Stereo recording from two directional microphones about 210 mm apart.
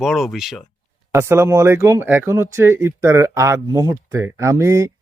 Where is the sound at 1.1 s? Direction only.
10° right (ahead or behind).